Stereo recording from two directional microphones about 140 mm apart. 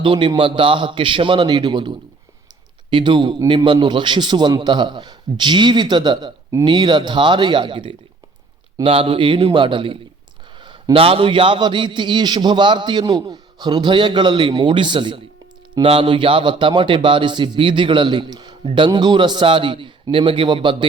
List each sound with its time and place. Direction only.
0.0 s a man's voice: 35° right (ahead or behind)